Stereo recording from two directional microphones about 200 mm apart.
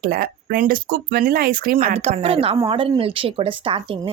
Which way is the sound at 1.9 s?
30° right (ahead or behind).